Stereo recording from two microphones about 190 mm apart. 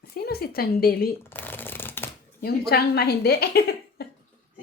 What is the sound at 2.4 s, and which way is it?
Speech, 55° left (ahead or behind).